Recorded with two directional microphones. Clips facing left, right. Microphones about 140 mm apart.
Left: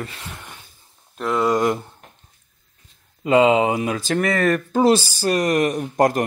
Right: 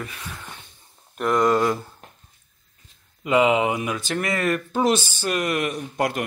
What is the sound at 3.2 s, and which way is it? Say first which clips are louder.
Speech: left 4 dB; 30° left (ahead or behind).